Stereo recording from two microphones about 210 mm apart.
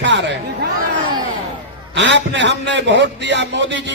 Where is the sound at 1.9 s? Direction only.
60° right (ahead or behind).